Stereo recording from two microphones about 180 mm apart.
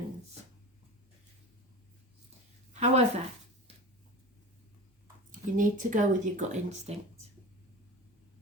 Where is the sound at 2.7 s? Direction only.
40° right (ahead or behind).